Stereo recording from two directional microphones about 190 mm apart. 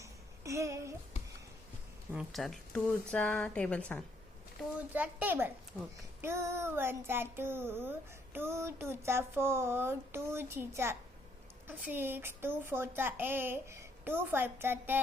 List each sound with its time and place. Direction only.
0.0 s a sound: 15° right (ahead or behind)
2.1 s a woman's voice: centre (ahead or behind)
4.9 s child singing: 10° right (ahead or behind)
5.7 s a child's voice: 10° left (ahead or behind)
6.2 s child singing: 15° right (ahead or behind)